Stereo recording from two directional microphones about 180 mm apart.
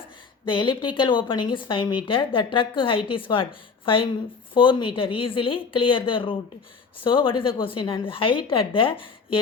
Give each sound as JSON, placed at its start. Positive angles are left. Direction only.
{"t": 0.4, "sound": "a woman's voice", "side_deg": 25}